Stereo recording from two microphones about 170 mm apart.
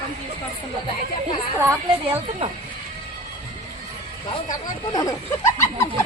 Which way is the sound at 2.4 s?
35° right (ahead or behind).